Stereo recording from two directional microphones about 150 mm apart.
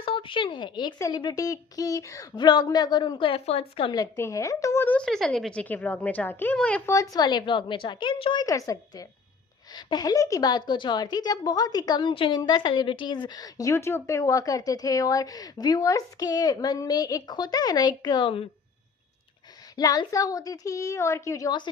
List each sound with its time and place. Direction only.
0.0 s a woman's voice: 35° left (ahead or behind)
4.0 s speech: 20° left (ahead or behind)
6.9 s a woman's voice: 25° left (ahead or behind)
19.7 s a woman's voice: 25° left (ahead or behind)